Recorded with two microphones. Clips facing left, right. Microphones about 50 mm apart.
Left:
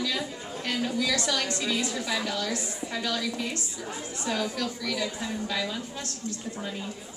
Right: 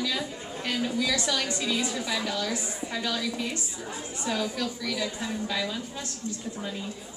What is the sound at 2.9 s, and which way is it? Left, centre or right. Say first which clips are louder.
Speech: even; centre.